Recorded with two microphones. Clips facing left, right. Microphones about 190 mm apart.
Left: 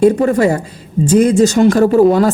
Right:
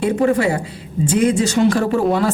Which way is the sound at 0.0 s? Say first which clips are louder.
Left 5 dB; 40° left (ahead or behind).